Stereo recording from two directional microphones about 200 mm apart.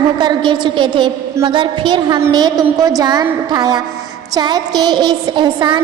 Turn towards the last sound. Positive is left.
turn(degrees=-20)  # may be behind; listen again after turning